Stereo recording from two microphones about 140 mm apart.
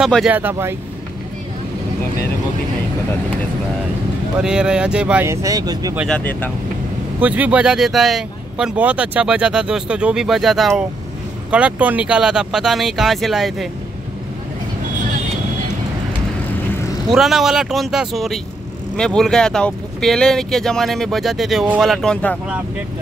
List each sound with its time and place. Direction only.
0.0 s speech: 5° right (ahead or behind)
0.4 s speech: 15° right (ahead or behind)
4.4 s speech: 5° right (ahead or behind)
5.2 s speech: 20° right (ahead or behind)
6.0 s speech: 10° left (ahead or behind)
7.2 s speech: 10° right (ahead or behind)
17.1 s speech: centre (ahead or behind)